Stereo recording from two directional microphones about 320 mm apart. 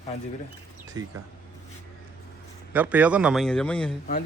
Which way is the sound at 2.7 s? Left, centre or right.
Centre.